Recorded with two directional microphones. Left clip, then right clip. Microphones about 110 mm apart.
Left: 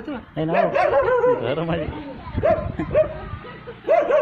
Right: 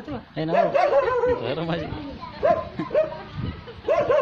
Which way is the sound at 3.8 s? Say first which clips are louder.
Left 3 dB; 15° right (ahead or behind).